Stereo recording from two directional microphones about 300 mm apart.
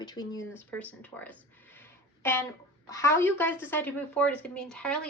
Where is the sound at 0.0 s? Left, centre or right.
Centre.